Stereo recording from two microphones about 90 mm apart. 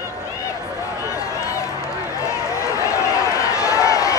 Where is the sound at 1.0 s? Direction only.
35° left (ahead or behind).